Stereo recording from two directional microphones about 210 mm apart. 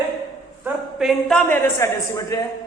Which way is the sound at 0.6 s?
Centre (ahead or behind).